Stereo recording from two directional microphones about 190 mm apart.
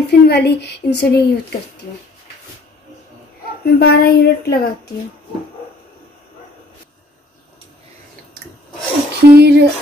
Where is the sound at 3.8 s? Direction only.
55° left (ahead or behind).